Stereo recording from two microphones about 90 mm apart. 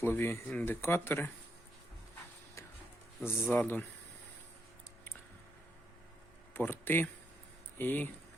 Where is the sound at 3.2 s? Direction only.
20° left (ahead or behind).